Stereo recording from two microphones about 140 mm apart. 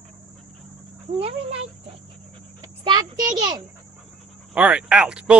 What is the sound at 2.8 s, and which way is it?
Speech, 30° right (ahead or behind).